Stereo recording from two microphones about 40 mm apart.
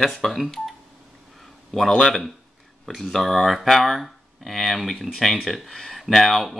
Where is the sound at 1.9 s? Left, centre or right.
Centre.